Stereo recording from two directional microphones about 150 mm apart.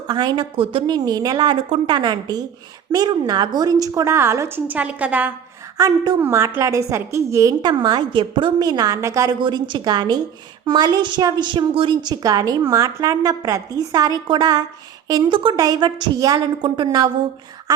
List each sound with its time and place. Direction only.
0.1 s a woman's voice: 30° right (ahead or behind); by 5.3 s 10° right (ahead or behind)
5.7 s a woman's voice: 20° right (ahead or behind)
9.4 s a woman's voice: 30° right (ahead or behind)